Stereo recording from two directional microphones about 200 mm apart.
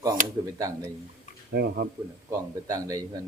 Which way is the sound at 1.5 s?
55° right (ahead or behind).